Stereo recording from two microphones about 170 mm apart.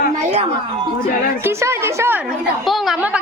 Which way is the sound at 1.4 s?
15° right (ahead or behind).